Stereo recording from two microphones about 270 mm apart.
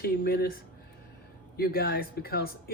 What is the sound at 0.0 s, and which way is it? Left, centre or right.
Speech, left.